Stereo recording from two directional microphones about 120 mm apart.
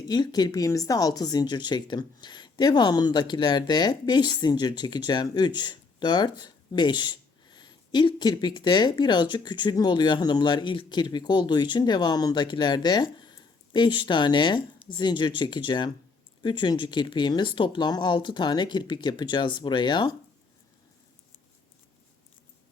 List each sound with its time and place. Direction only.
0.1 s speech: 35° left (ahead or behind)